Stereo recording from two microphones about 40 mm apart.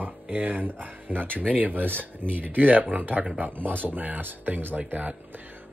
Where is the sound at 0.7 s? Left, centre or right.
Right.